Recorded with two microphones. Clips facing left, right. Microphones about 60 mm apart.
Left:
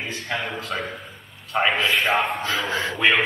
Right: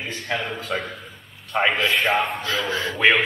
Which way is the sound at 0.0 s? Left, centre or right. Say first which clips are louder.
Right 1 dB; centre.